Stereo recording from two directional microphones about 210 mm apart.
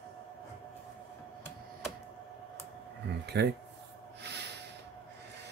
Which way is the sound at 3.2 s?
55° right (ahead or behind).